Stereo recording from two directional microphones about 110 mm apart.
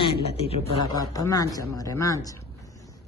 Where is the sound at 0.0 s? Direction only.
65° left (ahead or behind).